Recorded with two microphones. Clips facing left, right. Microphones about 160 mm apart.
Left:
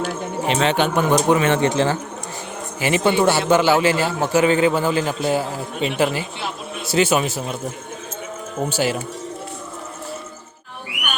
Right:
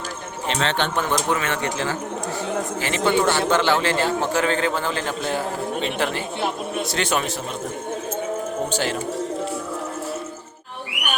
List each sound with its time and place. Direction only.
0.4 s a man's voice: 15° left (ahead or behind)
2.8 s a man's voice: 10° left (ahead or behind)
8.7 s a man's voice: 10° left (ahead or behind)